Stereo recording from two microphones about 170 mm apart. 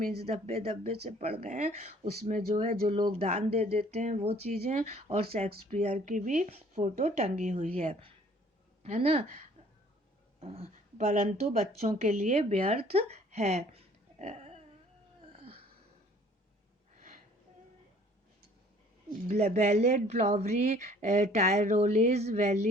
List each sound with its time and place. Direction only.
0.0 s speech: 70° right (ahead or behind)
0.3 s speech: 35° right (ahead or behind)
2.9 s speech: 35° right (ahead or behind)
10.4 s speech: 35° right (ahead or behind)
15.3 s a sound: 35° right (ahead or behind)
19.3 s speech: 40° right (ahead or behind)